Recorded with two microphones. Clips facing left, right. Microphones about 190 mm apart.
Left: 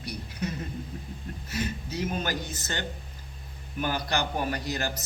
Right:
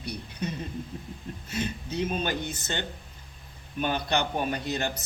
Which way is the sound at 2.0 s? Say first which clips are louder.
Right 2 dB; 25° right (ahead or behind).